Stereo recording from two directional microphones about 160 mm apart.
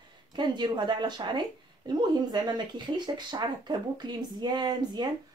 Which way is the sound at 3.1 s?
25° right (ahead or behind).